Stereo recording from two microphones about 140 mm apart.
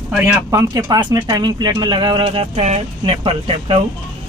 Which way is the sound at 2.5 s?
50° right (ahead or behind).